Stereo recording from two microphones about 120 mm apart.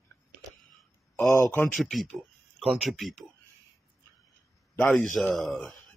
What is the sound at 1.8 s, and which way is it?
Speech, centre (ahead or behind).